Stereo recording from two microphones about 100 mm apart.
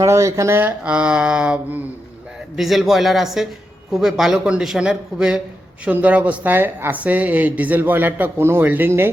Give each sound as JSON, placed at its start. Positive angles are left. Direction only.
{"t": 0.0, "sound": "speech", "side_deg": -30}
{"t": 0.9, "sound": "speech", "side_deg": -10}